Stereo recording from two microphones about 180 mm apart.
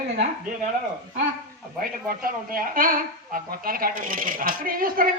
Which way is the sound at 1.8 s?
55° right (ahead or behind).